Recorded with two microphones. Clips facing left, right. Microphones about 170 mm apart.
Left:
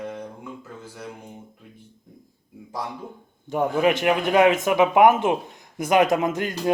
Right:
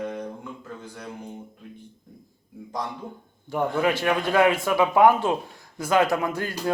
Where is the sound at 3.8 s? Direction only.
20° left (ahead or behind).